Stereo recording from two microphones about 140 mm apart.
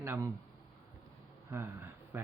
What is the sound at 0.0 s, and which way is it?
Speech, 20° right (ahead or behind).